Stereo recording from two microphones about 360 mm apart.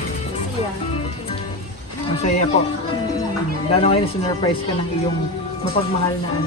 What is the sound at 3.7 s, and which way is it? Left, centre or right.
Speech, centre.